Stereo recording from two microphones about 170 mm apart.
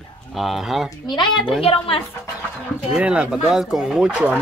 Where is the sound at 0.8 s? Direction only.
25° left (ahead or behind).